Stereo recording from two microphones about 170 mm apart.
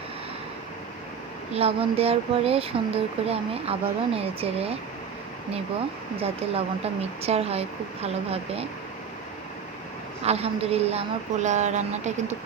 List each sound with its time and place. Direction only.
1.5 s speech: 35° right (ahead or behind)
6.1 s speech: 35° right (ahead or behind)
10.2 s speech: 35° right (ahead or behind)